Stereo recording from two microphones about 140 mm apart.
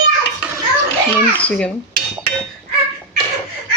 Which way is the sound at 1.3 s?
10° left (ahead or behind).